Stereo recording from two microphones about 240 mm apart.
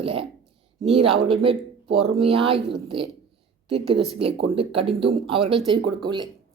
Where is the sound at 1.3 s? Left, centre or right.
Right.